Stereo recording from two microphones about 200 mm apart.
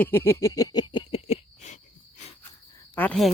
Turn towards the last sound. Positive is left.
turn(degrees=5)  # may be behind; listen again after turning